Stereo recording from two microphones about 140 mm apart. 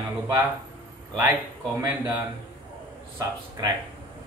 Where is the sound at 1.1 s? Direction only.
20° right (ahead or behind).